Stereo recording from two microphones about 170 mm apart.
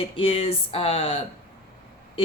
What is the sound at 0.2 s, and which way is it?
Speech, 35° left (ahead or behind).